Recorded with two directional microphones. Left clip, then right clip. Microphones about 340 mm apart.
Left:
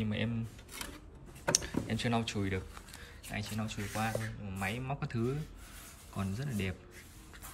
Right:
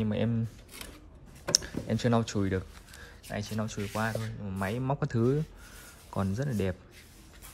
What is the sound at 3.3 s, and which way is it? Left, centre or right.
Speech, centre.